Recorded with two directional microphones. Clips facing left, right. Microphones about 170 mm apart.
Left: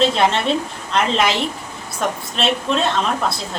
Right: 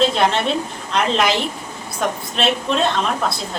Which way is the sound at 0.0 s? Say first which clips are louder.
Even; centre (ahead or behind).